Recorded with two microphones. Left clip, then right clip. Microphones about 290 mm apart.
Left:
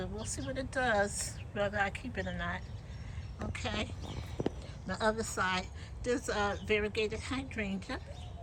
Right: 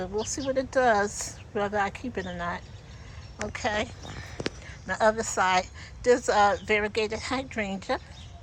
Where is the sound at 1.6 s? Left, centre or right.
Centre.